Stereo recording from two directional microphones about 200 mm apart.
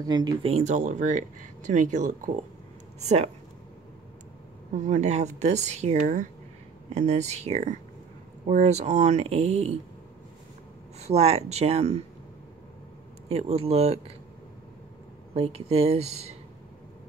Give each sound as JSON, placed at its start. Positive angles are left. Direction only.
{"t": 0.0, "sound": "speech", "side_deg": -20}
{"t": 4.7, "sound": "speech", "side_deg": -35}
{"t": 11.0, "sound": "speech", "side_deg": -30}
{"t": 13.3, "sound": "speech", "side_deg": -30}
{"t": 15.3, "sound": "speech", "side_deg": -30}